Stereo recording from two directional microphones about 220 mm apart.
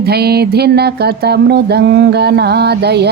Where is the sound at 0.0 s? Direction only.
45° right (ahead or behind).